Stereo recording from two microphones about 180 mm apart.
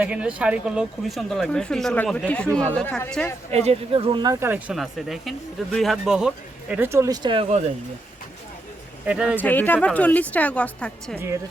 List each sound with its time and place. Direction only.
0.0 s speech: 5° right (ahead or behind)
3.5 s speech: 35° right (ahead or behind); by 4.6 s 15° right (ahead or behind)
4.7 s speech: centre (ahead or behind); by 7.6 s 30° right (ahead or behind)
9.0 s speech: 5° right (ahead or behind)
9.4 s a woman's voice: 10° left (ahead or behind)